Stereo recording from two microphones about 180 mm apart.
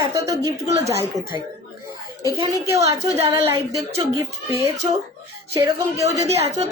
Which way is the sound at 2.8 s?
35° right (ahead or behind).